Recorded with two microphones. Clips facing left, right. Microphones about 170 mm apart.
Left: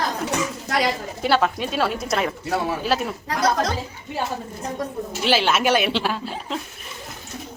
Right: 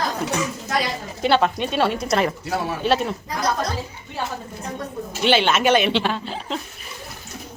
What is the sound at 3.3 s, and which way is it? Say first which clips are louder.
Speech: left 5 dB; 90° left.